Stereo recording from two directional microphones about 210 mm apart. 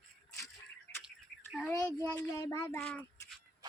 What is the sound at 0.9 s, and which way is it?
Bird, 10° left (ahead or behind).